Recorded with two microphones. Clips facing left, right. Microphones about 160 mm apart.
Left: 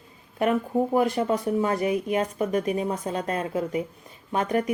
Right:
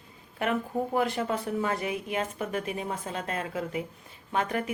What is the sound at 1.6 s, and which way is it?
Speech, 35° left (ahead or behind).